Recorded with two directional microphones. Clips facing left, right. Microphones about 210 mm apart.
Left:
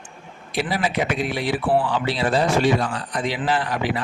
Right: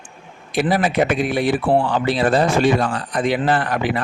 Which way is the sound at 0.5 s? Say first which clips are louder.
Right 6 dB; 55° right (ahead or behind).